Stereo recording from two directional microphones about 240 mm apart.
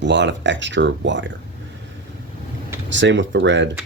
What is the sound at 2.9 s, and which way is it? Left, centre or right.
Speech, right.